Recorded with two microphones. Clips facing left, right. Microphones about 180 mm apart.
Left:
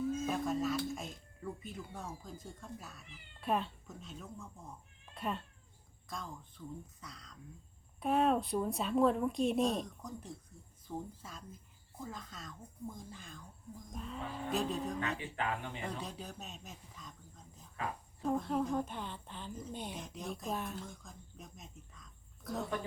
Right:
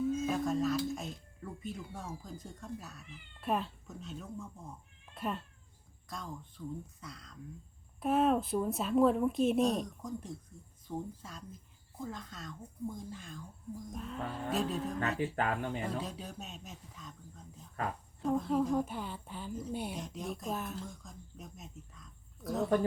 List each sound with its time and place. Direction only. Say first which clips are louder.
0.3 s a woman's voice: right 3 dB; centre (ahead or behind)
15.2 s speech: right 5 dB; 45° right (ahead or behind)
15.8 s a woman's voice: right 4 dB; centre (ahead or behind)